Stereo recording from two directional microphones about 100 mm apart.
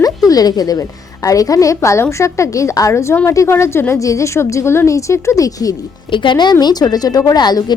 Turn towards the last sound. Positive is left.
turn(degrees=45)  # may be behind; listen again after turning